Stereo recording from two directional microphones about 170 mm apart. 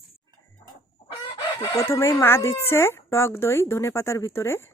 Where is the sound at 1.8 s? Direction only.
15° left (ahead or behind).